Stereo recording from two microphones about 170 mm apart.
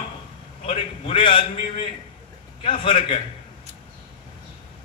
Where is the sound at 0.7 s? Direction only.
35° left (ahead or behind).